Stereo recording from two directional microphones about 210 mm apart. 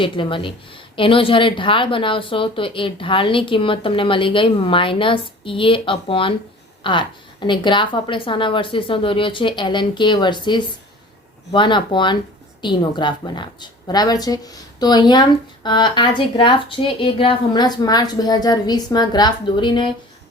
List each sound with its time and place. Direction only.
0.0 s speech: 25° left (ahead or behind)